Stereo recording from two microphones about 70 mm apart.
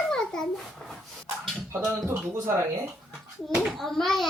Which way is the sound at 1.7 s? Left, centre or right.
Right.